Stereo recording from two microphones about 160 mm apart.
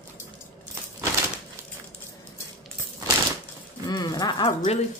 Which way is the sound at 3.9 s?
25° left (ahead or behind).